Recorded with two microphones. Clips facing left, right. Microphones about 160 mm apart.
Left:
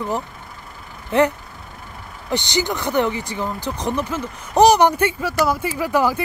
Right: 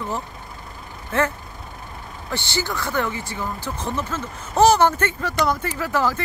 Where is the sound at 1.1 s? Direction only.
20° left (ahead or behind).